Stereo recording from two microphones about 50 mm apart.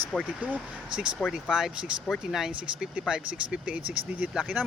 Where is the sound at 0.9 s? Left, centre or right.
Centre.